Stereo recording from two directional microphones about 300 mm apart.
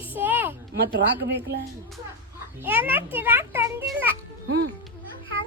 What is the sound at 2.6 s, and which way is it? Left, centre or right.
A child's voice, centre.